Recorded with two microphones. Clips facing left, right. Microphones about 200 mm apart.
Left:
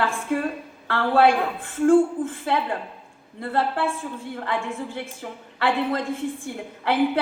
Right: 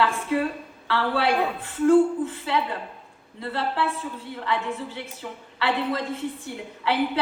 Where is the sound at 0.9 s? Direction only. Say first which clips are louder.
Left 5 dB; 50° left (ahead or behind).